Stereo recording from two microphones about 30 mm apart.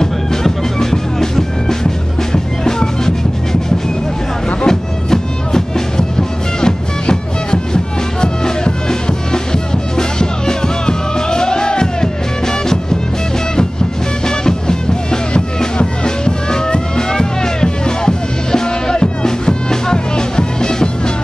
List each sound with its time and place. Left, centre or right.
0.0 s music: centre
4.6 s music: centre
14.2 s music: left